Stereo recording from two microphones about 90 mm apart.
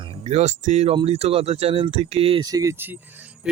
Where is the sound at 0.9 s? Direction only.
85° right.